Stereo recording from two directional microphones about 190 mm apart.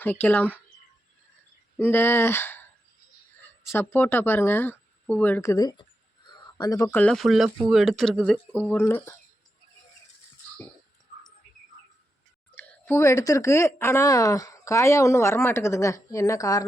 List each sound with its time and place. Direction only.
0.0 s speech: 10° left (ahead or behind)
1.8 s speech: 10° left (ahead or behind)
3.7 s speech: 10° left (ahead or behind)
12.5 s speech: 10° left (ahead or behind)